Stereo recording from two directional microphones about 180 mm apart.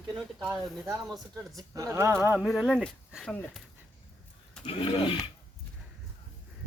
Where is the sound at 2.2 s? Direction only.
5° right (ahead or behind).